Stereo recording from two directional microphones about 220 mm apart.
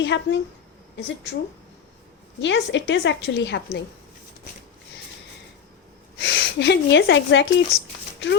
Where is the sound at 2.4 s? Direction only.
55° left (ahead or behind).